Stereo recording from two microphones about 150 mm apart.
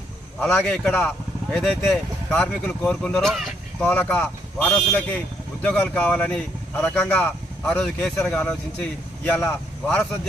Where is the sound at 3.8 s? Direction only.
10° left (ahead or behind).